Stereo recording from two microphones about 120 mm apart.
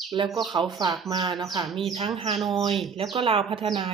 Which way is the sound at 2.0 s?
50° right (ahead or behind).